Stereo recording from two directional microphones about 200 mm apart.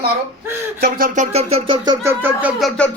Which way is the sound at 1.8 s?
10° right (ahead or behind).